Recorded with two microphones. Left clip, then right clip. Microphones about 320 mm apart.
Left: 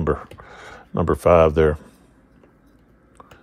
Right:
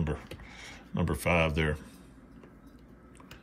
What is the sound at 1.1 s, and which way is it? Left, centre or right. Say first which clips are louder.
Speech: left 15 dB; left.